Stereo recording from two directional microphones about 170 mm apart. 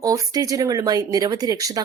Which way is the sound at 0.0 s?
20° right (ahead or behind).